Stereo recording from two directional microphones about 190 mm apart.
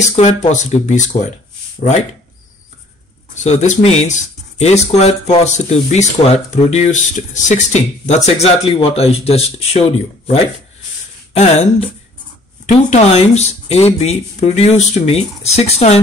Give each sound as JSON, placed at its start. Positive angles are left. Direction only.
{"t": 0.1, "sound": "speech", "side_deg": 35}
{"t": 3.3, "sound": "speech", "side_deg": 40}